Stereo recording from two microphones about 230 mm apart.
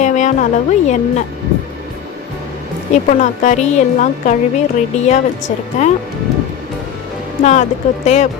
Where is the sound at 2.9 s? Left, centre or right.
Left.